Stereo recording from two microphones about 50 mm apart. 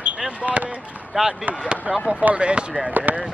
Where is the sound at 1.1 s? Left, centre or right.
Centre.